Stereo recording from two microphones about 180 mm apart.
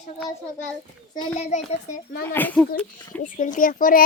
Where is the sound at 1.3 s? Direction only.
40° left (ahead or behind).